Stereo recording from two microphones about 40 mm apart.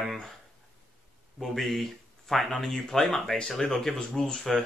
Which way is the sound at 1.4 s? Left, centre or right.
Centre.